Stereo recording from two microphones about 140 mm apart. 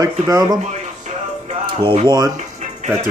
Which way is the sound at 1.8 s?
35° right (ahead or behind).